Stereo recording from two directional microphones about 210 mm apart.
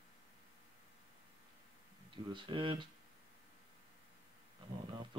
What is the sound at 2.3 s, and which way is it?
Speech, 25° right (ahead or behind).